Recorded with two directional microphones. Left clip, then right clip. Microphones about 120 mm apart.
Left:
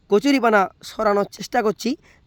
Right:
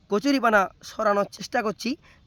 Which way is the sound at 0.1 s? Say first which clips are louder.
Left 4 dB; 30° left (ahead or behind).